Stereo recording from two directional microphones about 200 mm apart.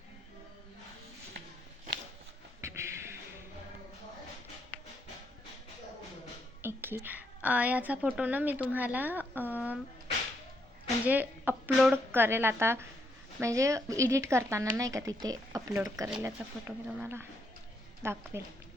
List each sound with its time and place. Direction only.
2.6 s a sound: 15° right (ahead or behind)
6.6 s a woman's voice: 10° right (ahead or behind)
11.0 s speech: 10° right (ahead or behind)